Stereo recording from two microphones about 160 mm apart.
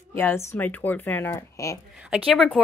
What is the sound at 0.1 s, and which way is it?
Speech, 15° left (ahead or behind).